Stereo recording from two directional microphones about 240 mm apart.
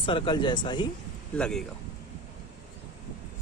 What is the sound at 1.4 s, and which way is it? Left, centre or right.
Speech, centre.